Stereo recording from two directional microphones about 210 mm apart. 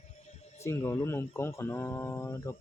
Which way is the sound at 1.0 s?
10° left (ahead or behind).